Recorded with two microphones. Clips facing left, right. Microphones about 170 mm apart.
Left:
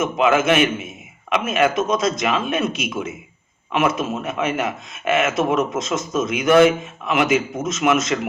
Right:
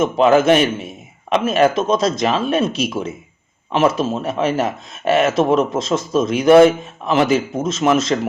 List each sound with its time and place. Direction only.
0.0 s speech: 35° right (ahead or behind)